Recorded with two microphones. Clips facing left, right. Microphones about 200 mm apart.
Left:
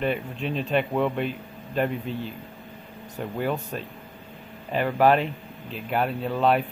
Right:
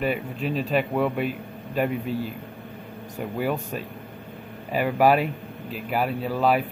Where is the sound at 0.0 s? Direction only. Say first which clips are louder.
Right 1 dB; 5° right (ahead or behind).